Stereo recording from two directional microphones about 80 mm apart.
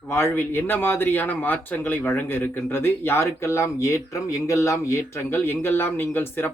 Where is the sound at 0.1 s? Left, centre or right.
Left.